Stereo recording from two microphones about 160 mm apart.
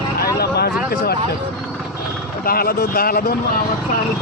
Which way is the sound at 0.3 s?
85° left.